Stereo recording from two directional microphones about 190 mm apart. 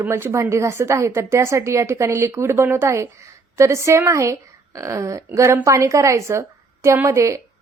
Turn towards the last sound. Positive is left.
turn(degrees=-15)  # may be behind; listen again after turning